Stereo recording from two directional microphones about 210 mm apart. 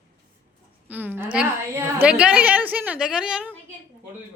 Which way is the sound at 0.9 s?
10° right (ahead or behind).